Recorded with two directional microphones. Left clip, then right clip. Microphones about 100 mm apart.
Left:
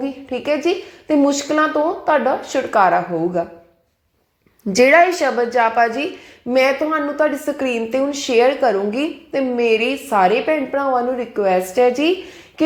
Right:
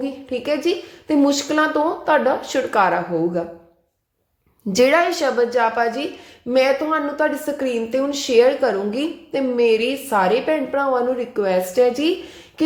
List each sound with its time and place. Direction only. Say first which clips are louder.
0.0 s a woman's voice: left 1 dB; 20° right (ahead or behind)
4.7 s a woman's voice: left 4 dB; centre (ahead or behind)